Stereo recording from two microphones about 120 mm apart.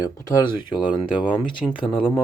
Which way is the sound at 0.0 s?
30° left (ahead or behind).